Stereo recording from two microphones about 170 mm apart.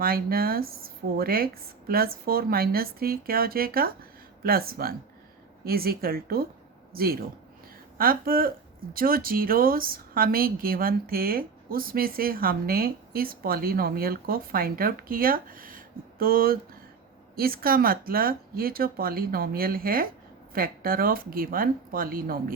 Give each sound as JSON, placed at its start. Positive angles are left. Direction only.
{"t": 0.0, "sound": "speech", "side_deg": -60}